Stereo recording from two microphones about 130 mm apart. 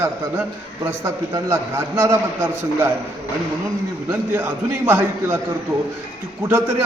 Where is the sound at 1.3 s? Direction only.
20° right (ahead or behind).